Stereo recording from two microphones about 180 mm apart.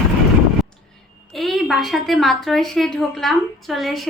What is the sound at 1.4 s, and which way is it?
A woman's voice, centre (ahead or behind).